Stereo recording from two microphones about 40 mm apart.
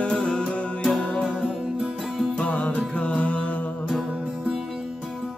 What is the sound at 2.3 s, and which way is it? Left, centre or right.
Music, left.